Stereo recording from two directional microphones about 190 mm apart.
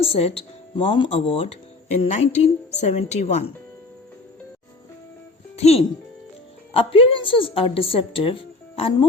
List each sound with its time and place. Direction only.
0.0 s a woman's voice: 30° left (ahead or behind)
5.5 s a woman's voice: 35° left (ahead or behind)